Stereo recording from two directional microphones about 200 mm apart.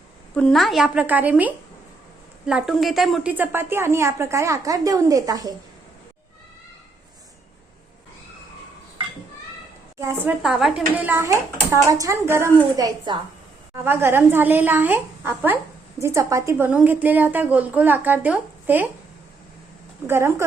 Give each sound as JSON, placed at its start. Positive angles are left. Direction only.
{"t": 0.3, "sound": "a woman's voice", "side_deg": 5}
{"t": 10.0, "sound": "a woman's voice", "side_deg": -15}
{"t": 10.4, "sound": "a woman's voice", "side_deg": 0}
{"t": 20.1, "sound": "a woman's voice", "side_deg": -10}